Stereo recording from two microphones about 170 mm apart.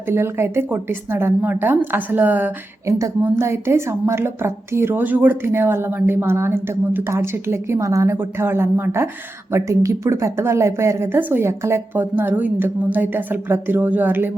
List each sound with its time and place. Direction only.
0.1 s a woman's voice: 15° right (ahead or behind)